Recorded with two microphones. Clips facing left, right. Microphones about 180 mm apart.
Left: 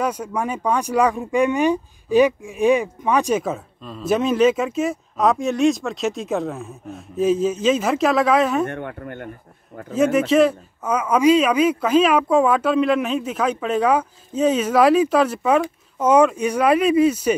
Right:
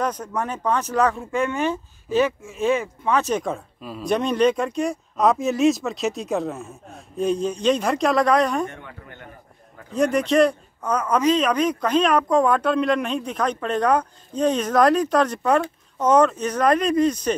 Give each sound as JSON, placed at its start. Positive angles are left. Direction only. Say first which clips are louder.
{"t": 0.0, "sound": "a man's voice", "louder": "left 2 dB", "side_deg": 10}
{"t": 8.6, "sound": "speech", "louder": "left 8 dB", "side_deg": 60}
{"t": 9.9, "sound": "a man's voice", "louder": "left 2 dB", "side_deg": 5}